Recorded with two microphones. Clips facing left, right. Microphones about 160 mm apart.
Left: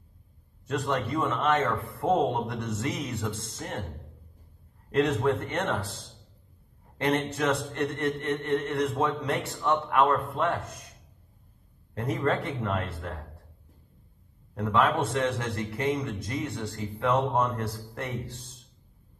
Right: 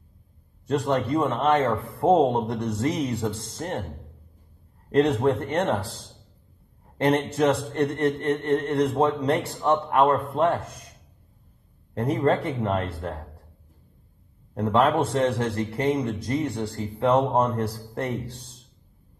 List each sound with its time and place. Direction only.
0.7 s a man's voice: 35° right (ahead or behind)
4.9 s a man's voice: 35° right (ahead or behind)
7.0 s a man's voice: 35° right (ahead or behind)
11.9 s a man's voice: 35° right (ahead or behind)
14.5 s a man's voice: 40° right (ahead or behind)